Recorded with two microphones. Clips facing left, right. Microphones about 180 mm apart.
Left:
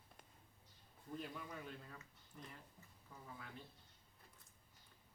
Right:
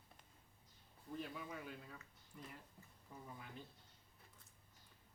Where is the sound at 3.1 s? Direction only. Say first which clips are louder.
Right 3 dB; 20° right (ahead or behind).